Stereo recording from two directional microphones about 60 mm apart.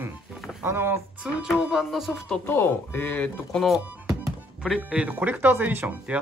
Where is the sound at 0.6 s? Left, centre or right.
Right.